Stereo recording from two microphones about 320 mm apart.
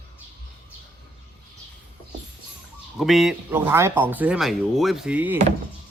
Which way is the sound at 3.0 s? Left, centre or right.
Centre.